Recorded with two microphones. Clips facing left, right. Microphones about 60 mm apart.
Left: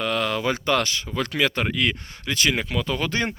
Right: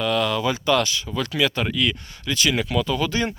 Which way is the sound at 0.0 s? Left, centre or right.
Left.